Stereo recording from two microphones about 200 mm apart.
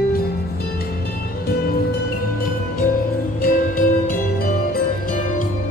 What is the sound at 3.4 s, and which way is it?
Music, 45° left (ahead or behind).